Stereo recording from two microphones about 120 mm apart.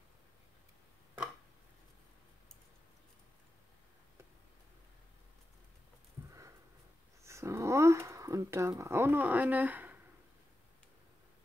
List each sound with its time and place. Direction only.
7.2 s speech: 25° right (ahead or behind)